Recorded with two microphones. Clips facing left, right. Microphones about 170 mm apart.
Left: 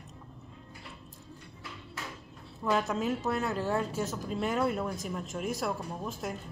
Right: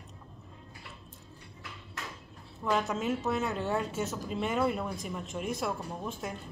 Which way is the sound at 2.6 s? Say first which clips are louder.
Left 1 dB; centre (ahead or behind).